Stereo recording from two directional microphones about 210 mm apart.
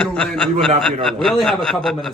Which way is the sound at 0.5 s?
30° right (ahead or behind).